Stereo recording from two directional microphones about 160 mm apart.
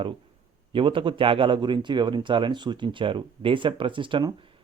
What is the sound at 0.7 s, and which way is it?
Speech, 30° right (ahead or behind).